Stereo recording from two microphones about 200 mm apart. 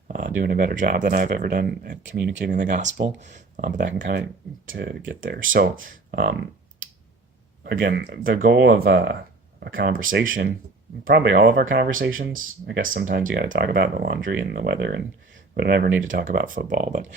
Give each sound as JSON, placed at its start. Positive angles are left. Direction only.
{"t": 0.1, "sound": "speech", "side_deg": -40}
{"t": 2.0, "sound": "speech", "side_deg": -60}
{"t": 4.7, "sound": "speech", "side_deg": -55}
{"t": 7.6, "sound": "speech", "side_deg": -55}
{"t": 8.9, "sound": "speech", "side_deg": -60}
{"t": 11.0, "sound": "speech", "side_deg": -55}
{"t": 14.2, "sound": "speech", "side_deg": -65}
{"t": 14.5, "sound": "speech", "side_deg": -50}